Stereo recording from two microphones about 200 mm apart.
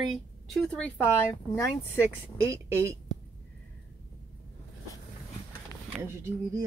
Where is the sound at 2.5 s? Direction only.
15° right (ahead or behind).